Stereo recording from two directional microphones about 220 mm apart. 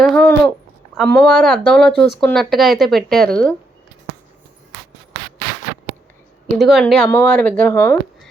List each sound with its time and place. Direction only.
0.0 s a sound: 5° left (ahead or behind)
0.9 s speech: centre (ahead or behind)
6.6 s speech: centre (ahead or behind)